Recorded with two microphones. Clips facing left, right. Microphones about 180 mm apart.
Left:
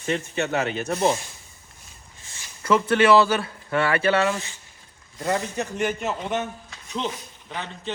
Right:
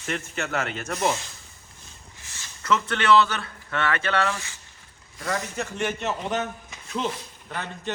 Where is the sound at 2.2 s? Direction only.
20° left (ahead or behind).